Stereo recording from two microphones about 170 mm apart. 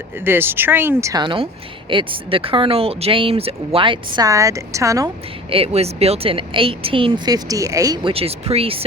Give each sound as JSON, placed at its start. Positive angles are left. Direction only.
{"t": 0.2, "sound": "speech", "side_deg": -15}
{"t": 5.5, "sound": "speech", "side_deg": -35}
{"t": 8.1, "sound": "speech", "side_deg": -35}